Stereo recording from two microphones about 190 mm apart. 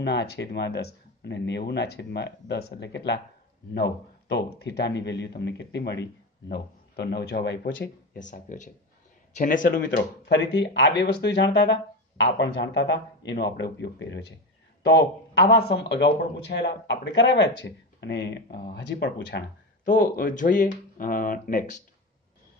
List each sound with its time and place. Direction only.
0.0 s speech: 60° left (ahead or behind); by 9.8 s 45° left (ahead or behind)
9.9 s speech: 65° left (ahead or behind)
19.8 s speech: 45° left (ahead or behind)